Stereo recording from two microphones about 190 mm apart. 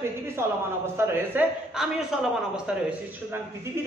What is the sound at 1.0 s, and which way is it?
Speech, 10° right (ahead or behind).